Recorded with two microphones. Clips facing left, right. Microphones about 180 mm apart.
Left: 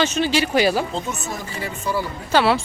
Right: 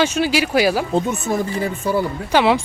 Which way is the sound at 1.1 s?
55° right (ahead or behind).